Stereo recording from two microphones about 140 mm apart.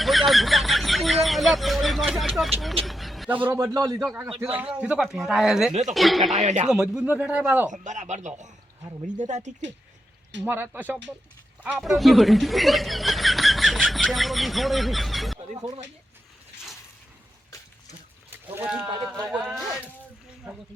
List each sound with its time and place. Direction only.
0.0 s a sound: centre (ahead or behind)
3.2 s speech: 15° right (ahead or behind)
3.7 s a man's voice: 25° right (ahead or behind)
4.5 s a man's voice: 10° right (ahead or behind)
6.3 s speech: 55° right (ahead or behind)
6.7 s speech: 5° right (ahead or behind)
7.7 s speech: 60° right (ahead or behind)
10.4 s speech: 15° right (ahead or behind)
11.7 s speech: centre (ahead or behind)
18.3 s a sound: 10° right (ahead or behind)
19.3 s a man's voice: 5° right (ahead or behind)